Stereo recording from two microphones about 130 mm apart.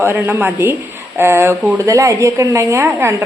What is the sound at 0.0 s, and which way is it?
A woman's voice, 15° right (ahead or behind).